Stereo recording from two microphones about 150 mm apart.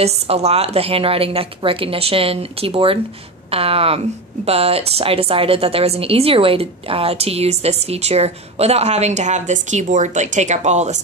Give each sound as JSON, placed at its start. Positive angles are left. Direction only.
{"t": 0.0, "sound": "a woman's voice", "side_deg": -45}